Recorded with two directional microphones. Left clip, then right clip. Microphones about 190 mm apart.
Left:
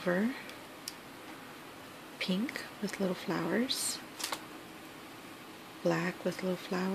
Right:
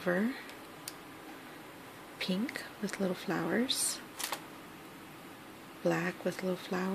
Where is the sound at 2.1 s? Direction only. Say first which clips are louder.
Left 1 dB; centre (ahead or behind).